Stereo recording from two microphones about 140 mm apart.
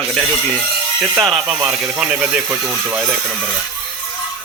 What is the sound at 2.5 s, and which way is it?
Speech, 20° right (ahead or behind).